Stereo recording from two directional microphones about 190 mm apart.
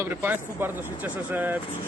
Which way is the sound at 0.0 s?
10° right (ahead or behind).